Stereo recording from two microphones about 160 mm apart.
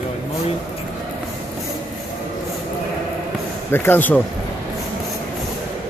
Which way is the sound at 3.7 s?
15° left (ahead or behind).